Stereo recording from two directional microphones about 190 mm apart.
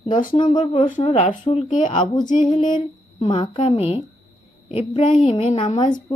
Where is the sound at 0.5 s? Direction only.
25° left (ahead or behind).